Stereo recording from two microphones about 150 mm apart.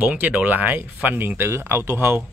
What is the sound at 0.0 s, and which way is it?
A man's voice, 10° right (ahead or behind).